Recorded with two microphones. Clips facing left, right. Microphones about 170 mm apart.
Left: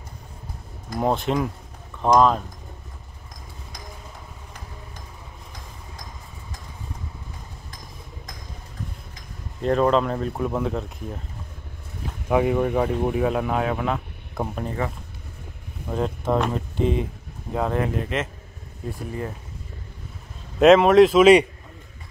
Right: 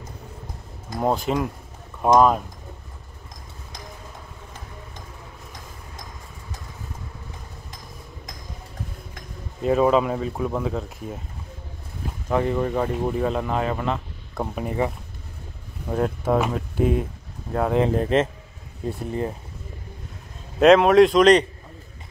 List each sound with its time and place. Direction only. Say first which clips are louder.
0.9 s speech: even; centre (ahead or behind)
9.6 s speech: right 1 dB; 5° right (ahead or behind)
12.3 s speech: left 2 dB; 10° left (ahead or behind)
14.6 s speech: right 5 dB; 15° right (ahead or behind)
15.9 s speech: right 2 dB; 5° right (ahead or behind)
17.8 s speech: right 6 dB; 35° right (ahead or behind)
20.5 s speech: even; centre (ahead or behind)